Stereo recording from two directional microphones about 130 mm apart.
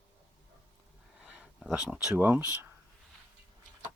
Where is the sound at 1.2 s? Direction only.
5° right (ahead or behind).